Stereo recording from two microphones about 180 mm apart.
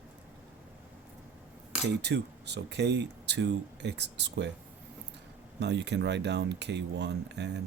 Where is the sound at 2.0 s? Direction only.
70° right (ahead or behind).